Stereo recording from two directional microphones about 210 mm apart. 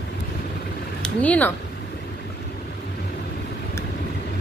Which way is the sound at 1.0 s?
5° left (ahead or behind).